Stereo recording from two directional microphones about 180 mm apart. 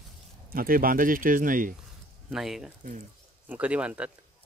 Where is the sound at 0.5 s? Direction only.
55° right (ahead or behind).